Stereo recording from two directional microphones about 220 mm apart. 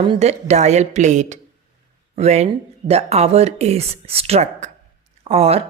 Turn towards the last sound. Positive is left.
turn(degrees=-25)  # may be behind; listen again after turning